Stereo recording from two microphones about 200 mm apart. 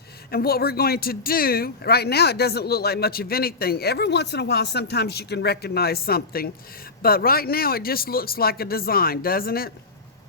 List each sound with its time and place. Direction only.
0.3 s speech: 50° left (ahead or behind)